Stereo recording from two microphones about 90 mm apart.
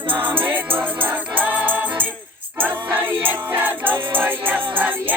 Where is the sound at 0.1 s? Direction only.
20° right (ahead or behind).